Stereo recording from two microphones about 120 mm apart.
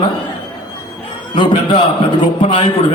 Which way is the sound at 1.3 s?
40° left (ahead or behind).